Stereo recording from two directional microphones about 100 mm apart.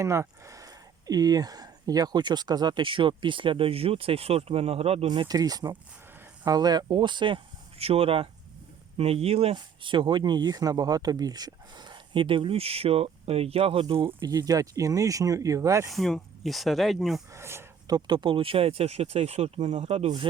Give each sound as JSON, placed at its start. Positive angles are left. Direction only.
{"t": 0.0, "sound": "speech", "side_deg": -30}
{"t": 5.0, "sound": "speech", "side_deg": -55}
{"t": 5.3, "sound": "speech", "side_deg": -40}
{"t": 9.0, "sound": "speech", "side_deg": -85}
{"t": 9.6, "sound": "speech", "side_deg": -55}
{"t": 14.2, "sound": "speech", "side_deg": -35}
{"t": 15.9, "sound": "speech", "side_deg": 0}
{"t": 17.3, "sound": "speech", "side_deg": -25}
{"t": 17.8, "sound": "speech", "side_deg": -45}